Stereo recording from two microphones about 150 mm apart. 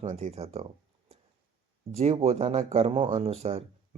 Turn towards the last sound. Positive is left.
turn(degrees=-40)  # may be behind; listen again after turning